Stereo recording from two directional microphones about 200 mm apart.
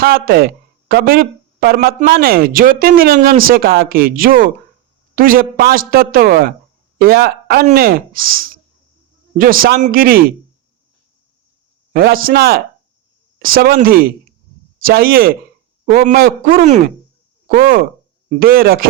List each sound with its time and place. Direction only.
0.0 s speech: 50° right (ahead or behind)
11.9 s speech: 45° right (ahead or behind)